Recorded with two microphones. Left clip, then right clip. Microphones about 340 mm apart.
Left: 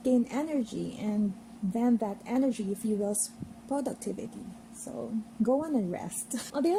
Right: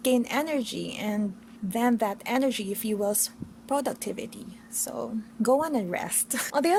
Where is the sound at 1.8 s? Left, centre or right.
Right.